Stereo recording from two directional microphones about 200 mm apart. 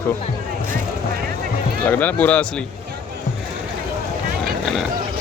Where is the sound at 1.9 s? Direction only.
10° left (ahead or behind).